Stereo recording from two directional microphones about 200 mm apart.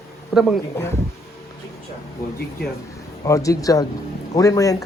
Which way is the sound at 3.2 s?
15° left (ahead or behind).